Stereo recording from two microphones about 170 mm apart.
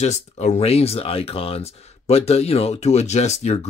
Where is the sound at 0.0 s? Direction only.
40° left (ahead or behind).